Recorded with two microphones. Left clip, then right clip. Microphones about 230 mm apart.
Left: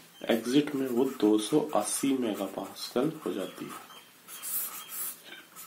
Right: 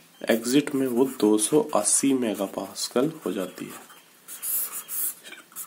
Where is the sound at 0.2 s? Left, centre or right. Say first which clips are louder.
Right 4 dB; right.